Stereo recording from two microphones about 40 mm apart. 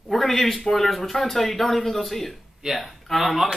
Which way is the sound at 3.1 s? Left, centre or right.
Centre.